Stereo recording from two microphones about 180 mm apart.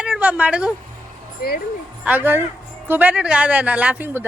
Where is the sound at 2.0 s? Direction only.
10° right (ahead or behind).